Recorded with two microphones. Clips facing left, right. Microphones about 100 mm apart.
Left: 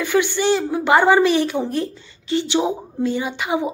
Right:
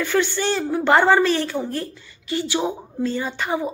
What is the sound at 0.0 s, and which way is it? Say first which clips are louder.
Speech: left 3 dB; 15° left (ahead or behind).